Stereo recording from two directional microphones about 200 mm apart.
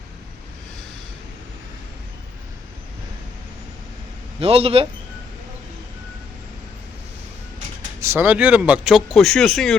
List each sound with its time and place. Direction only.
4.4 s a man's voice: 30° right (ahead or behind)
8.0 s speech: 10° right (ahead or behind)